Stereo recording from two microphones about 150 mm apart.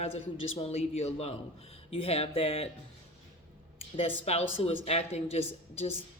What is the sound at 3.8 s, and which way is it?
Speech, 40° left (ahead or behind).